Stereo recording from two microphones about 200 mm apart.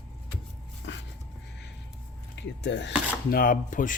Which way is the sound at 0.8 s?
65° left (ahead or behind).